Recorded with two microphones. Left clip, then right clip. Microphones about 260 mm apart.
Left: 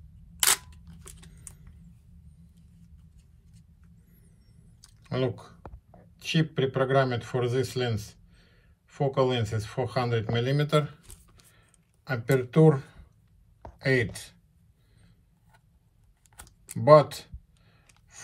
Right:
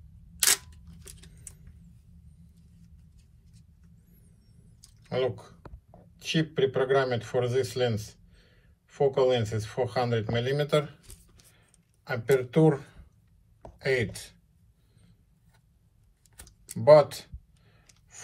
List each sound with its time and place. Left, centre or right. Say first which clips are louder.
4.8 s typing: right 2 dB; left
6.1 s speech: even; left
12.0 s speech: right 2 dB; left
16.8 s a sound: even; left